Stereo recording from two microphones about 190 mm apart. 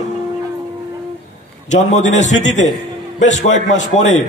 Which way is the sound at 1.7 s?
40° left (ahead or behind).